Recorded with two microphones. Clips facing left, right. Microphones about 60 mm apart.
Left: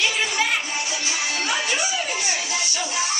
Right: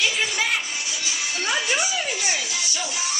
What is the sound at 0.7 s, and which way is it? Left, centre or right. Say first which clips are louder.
Music: left 3 dB; left.